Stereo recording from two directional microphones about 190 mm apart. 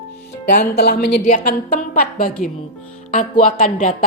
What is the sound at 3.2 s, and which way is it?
Speech, 35° left (ahead or behind).